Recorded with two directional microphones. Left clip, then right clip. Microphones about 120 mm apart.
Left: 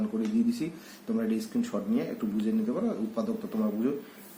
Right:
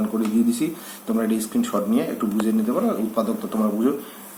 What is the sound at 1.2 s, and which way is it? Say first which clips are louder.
Speech: right 8 dB; 5° left (ahead or behind).